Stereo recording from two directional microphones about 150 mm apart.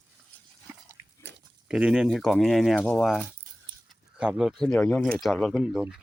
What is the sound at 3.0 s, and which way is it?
Speech, centre (ahead or behind).